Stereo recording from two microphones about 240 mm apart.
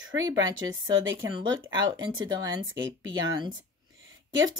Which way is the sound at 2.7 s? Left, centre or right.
Right.